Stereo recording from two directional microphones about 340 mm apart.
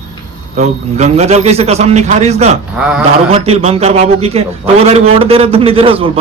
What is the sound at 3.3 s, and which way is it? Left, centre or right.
A man's voice, centre.